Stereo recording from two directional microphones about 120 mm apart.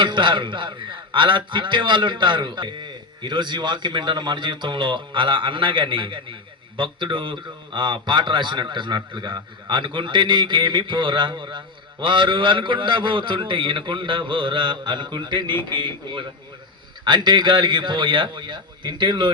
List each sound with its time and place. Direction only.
0.0 s a man's voice: 40° right (ahead or behind)